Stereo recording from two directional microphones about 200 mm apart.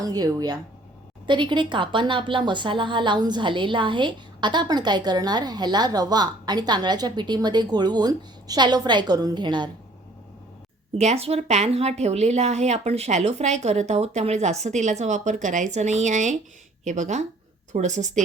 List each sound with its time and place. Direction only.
0.0 s a woman's voice: 20° right (ahead or behind)
10.9 s a woman's voice: 30° right (ahead or behind)